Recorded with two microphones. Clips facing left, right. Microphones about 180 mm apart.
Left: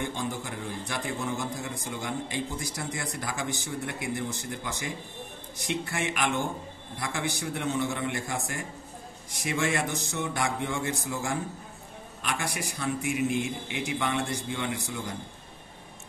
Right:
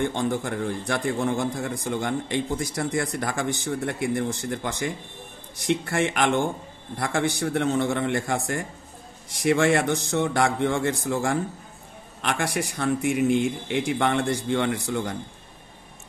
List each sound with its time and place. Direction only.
0.0 s a man's voice: 60° right (ahead or behind)